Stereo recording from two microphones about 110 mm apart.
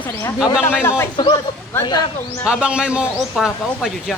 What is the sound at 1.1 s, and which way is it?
A man's voice, 45° left (ahead or behind).